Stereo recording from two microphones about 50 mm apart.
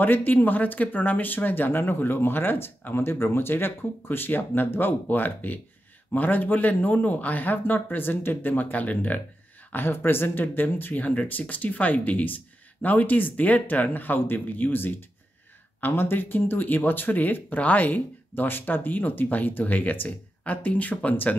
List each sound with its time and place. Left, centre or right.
0.0 s speech: left
9.7 s speech: left